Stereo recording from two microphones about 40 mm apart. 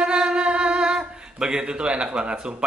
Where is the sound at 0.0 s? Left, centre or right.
Right.